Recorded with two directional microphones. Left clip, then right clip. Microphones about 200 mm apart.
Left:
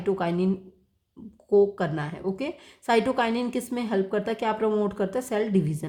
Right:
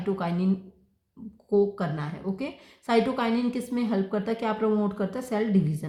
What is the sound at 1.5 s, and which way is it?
A woman's voice, 55° left (ahead or behind).